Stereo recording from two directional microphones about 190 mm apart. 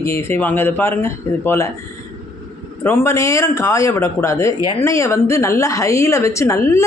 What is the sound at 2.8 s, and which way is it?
A woman's voice, 15° left (ahead or behind).